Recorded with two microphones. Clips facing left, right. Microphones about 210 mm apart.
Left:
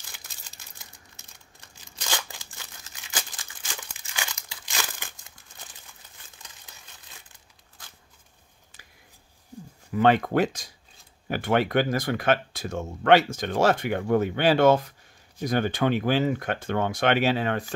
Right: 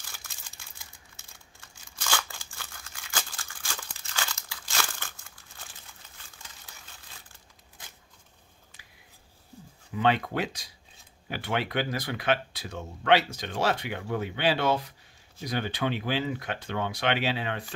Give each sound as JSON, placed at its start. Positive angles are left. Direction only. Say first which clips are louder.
{"t": 2.0, "sound": "scissors", "louder": "even", "side_deg": 20}
{"t": 4.8, "sound": "crumpling", "louder": "even", "side_deg": 15}
{"t": 9.9, "sound": "speech", "louder": "left 6 dB", "side_deg": 50}